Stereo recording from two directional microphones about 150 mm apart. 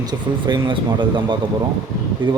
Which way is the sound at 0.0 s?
30° right (ahead or behind).